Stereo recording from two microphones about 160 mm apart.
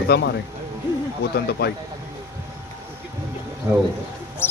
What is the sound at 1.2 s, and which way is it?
Speech, 85° left.